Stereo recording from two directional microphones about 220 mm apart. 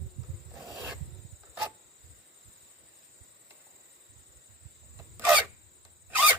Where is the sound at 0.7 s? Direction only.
15° right (ahead or behind).